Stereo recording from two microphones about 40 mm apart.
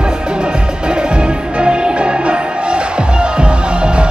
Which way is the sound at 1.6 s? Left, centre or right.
Right.